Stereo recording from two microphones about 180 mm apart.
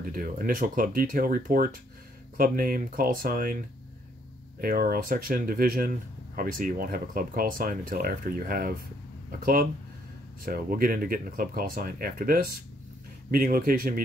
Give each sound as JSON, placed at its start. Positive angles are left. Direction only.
{"t": 0.1, "sound": "speech", "side_deg": -50}
{"t": 4.6, "sound": "speech", "side_deg": -55}